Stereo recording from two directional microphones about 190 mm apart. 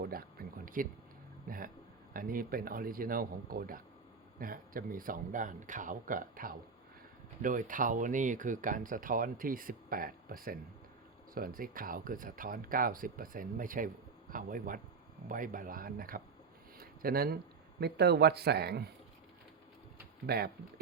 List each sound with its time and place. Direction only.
0.0 s a sound: 50° right (ahead or behind)
1.5 s speech: 45° right (ahead or behind)
20.2 s speech: 55° right (ahead or behind)